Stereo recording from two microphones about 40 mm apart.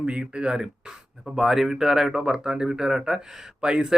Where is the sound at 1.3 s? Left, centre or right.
Centre.